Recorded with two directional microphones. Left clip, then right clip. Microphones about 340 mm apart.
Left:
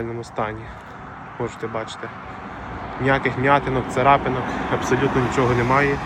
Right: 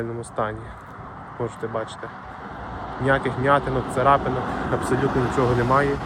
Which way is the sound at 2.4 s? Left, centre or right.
Left.